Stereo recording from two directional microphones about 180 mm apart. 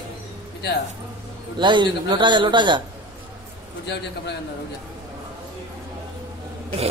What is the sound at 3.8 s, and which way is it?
Speech, 70° left (ahead or behind).